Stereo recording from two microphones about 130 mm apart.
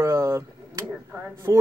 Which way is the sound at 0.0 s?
25° right (ahead or behind).